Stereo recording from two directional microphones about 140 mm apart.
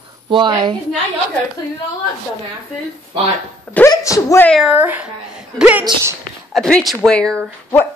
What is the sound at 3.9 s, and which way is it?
Speech, 25° left (ahead or behind).